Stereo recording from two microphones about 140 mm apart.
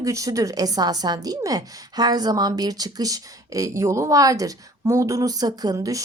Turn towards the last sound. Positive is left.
turn(degrees=-25)  # may be behind; listen again after turning